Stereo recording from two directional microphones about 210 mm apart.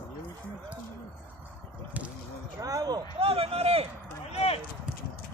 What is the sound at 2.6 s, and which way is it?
Speech, 15° right (ahead or behind).